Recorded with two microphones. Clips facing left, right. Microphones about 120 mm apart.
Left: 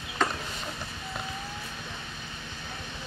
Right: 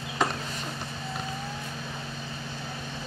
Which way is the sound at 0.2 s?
10° right (ahead or behind).